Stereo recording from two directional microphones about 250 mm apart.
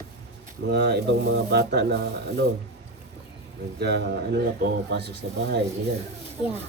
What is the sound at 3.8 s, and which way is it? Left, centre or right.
A man's voice, right.